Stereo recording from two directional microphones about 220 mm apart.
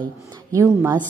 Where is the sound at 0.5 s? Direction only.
15° right (ahead or behind).